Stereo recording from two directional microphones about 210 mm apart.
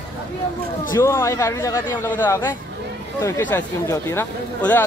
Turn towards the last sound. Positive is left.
turn(degrees=10)  # may be behind; listen again after turning